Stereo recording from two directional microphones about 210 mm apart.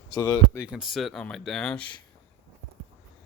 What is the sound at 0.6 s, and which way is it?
Speech, 5° right (ahead or behind).